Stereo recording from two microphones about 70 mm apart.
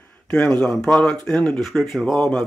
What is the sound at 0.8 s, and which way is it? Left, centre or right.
Speech, centre.